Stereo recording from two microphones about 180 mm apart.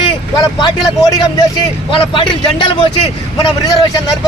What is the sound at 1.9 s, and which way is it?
Speech, 25° left (ahead or behind).